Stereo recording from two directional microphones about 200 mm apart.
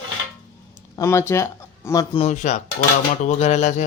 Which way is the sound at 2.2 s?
35° left (ahead or behind).